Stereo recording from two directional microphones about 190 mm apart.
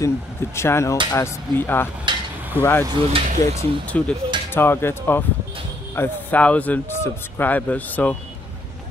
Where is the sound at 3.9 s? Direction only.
5° left (ahead or behind).